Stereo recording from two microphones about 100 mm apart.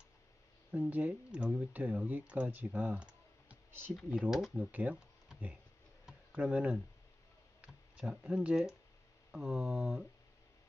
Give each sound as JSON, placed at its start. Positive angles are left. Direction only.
{"t": 0.7, "sound": "speech", "side_deg": -15}
{"t": 4.6, "sound": "speech", "side_deg": -15}
{"t": 6.0, "sound": "a sound", "side_deg": -10}
{"t": 8.2, "sound": "speech", "side_deg": -5}